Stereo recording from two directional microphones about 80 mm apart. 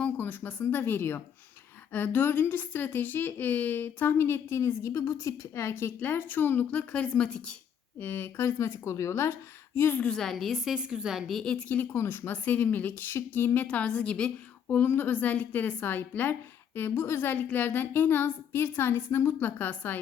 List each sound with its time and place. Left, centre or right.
0.0 s a sound: left
0.6 s speech: left; by 7.5 s centre
7.9 s a woman's voice: left
10.0 s a woman's voice: centre
11.9 s speech: left; by 14.3 s centre
14.7 s speech: left